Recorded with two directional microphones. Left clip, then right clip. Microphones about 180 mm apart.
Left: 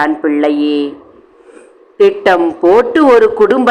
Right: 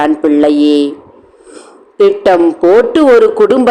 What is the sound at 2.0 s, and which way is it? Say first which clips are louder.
A man's voice: right 2 dB; 20° right (ahead or behind).